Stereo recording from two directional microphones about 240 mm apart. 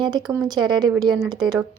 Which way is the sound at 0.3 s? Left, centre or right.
Centre.